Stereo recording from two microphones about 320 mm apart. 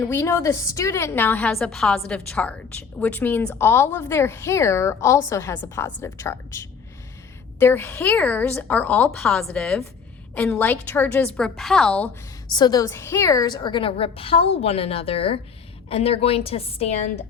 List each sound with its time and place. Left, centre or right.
0.0 s a woman's voice: centre